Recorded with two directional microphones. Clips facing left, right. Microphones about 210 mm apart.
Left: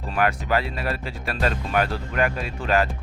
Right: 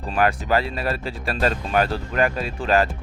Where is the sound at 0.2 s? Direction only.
35° right (ahead or behind).